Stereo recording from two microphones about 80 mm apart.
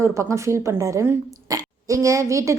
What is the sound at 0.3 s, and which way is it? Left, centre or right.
A woman's voice, right.